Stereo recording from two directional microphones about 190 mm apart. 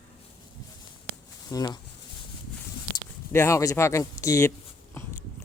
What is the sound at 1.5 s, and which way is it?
Speech, 20° left (ahead or behind).